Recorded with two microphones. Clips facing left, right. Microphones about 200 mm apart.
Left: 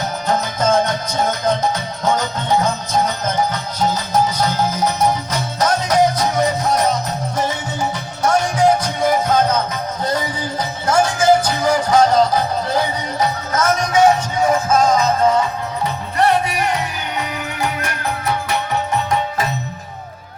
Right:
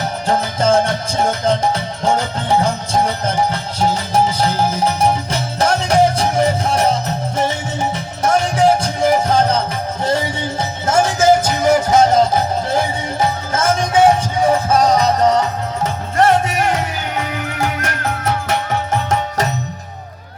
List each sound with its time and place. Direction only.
0.3 s music: 30° right (ahead or behind); by 19.5 s 50° right (ahead or behind)